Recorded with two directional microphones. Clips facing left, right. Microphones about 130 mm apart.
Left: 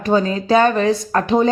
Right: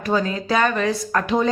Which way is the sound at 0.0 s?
30° left (ahead or behind).